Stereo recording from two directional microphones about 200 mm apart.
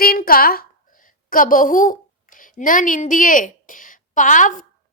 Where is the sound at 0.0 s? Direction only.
50° left (ahead or behind).